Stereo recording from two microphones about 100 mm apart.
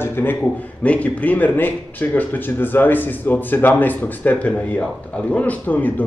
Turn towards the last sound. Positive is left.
turn(degrees=15)  # may be behind; listen again after turning